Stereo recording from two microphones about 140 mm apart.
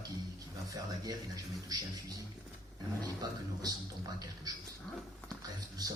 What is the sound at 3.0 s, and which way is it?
Speech, 25° right (ahead or behind).